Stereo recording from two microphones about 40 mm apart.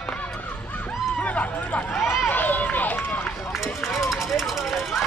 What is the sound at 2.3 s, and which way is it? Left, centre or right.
Run, left.